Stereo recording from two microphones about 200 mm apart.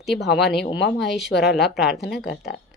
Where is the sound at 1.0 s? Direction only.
Centre (ahead or behind).